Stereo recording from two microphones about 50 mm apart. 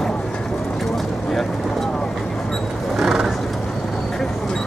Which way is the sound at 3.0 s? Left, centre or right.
Centre.